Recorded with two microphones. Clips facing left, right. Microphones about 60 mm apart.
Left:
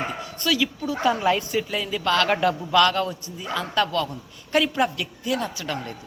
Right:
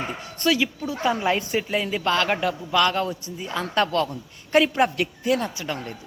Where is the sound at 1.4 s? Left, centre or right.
Right.